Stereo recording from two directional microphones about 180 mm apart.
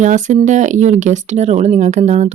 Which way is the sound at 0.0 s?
45° right (ahead or behind).